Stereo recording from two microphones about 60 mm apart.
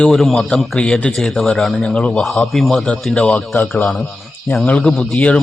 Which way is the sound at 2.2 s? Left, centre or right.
Centre.